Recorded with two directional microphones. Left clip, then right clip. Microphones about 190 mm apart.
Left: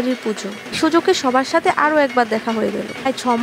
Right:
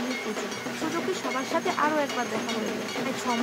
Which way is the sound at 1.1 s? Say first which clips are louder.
Left 12 dB; 40° left (ahead or behind).